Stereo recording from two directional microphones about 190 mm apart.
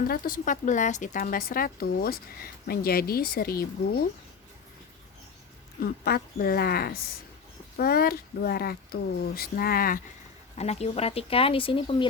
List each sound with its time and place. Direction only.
0.1 s speech: 45° left (ahead or behind)
5.8 s speech: 50° left (ahead or behind)
10.6 s speech: 35° left (ahead or behind)